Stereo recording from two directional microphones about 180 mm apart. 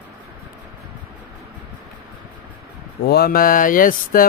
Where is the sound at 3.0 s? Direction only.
60° left (ahead or behind).